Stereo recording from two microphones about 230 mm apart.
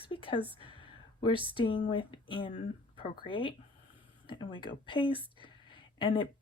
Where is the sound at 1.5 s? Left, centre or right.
Left.